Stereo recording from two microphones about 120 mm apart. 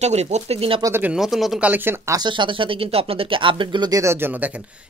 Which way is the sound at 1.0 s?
5° right (ahead or behind).